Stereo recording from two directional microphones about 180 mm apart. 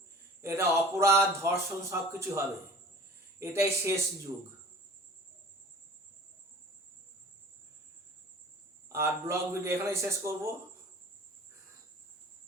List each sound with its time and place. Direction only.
0.4 s speech: 15° right (ahead or behind)
3.4 s speech: 15° right (ahead or behind)
8.9 s speech: 15° right (ahead or behind)